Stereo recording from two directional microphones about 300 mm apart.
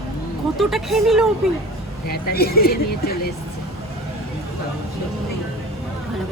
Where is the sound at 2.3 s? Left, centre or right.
Left.